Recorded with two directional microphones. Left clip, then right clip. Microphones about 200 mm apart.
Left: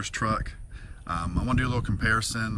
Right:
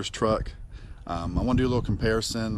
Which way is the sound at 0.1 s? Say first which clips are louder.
Right 4 dB; 5° right (ahead or behind).